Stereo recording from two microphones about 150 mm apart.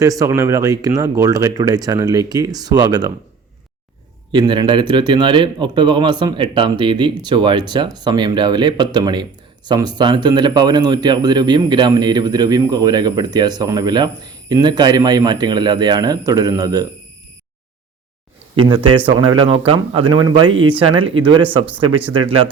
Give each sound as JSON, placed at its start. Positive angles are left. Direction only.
{"t": 0.0, "sound": "speech", "side_deg": -20}
{"t": 4.3, "sound": "speech", "side_deg": -30}
{"t": 18.6, "sound": "speech", "side_deg": -35}